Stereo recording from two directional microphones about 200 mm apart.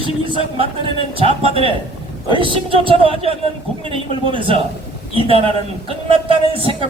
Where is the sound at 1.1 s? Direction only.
30° right (ahead or behind).